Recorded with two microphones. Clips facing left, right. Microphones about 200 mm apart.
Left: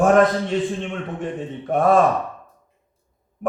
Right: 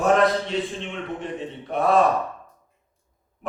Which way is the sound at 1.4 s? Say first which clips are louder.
Left 6 dB; 50° left (ahead or behind).